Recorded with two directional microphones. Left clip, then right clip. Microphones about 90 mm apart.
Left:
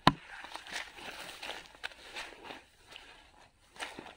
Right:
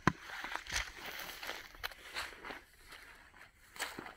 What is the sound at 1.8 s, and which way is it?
Walk, 15° right (ahead or behind).